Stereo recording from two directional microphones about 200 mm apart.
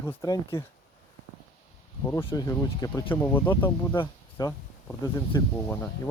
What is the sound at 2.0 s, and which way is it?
Speech, 10° left (ahead or behind).